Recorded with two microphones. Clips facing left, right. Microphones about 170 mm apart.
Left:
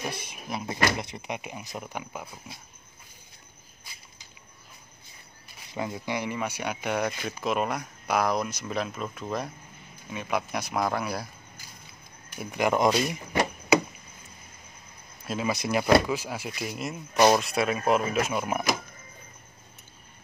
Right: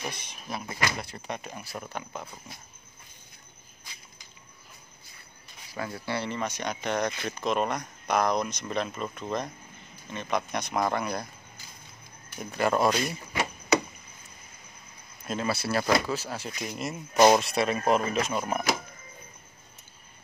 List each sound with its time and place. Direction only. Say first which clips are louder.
0.1 s speech: left 5 dB; 5° left (ahead or behind)
0.5 s speech: left 4 dB; 20° left (ahead or behind)
5.7 s speech: left 2 dB; 20° left (ahead or behind); by 11.2 s 5° left (ahead or behind)
12.4 s speech: left 1 dB; 15° left (ahead or behind)
15.2 s speech: left 1 dB; 5° left (ahead or behind)
15.5 s speech: left 5 dB; 15° left (ahead or behind)